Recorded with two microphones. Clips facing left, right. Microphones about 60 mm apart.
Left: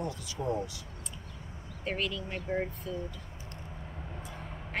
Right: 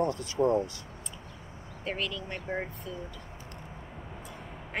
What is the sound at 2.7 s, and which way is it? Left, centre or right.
Speech, centre.